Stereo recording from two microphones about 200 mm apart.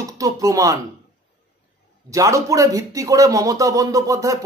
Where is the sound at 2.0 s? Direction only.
15° right (ahead or behind).